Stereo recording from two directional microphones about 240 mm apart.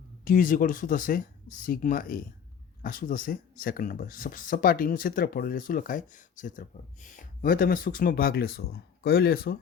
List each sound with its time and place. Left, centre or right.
0.3 s speech: left